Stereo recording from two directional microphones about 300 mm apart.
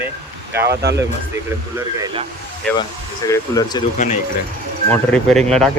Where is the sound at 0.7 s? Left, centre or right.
Right.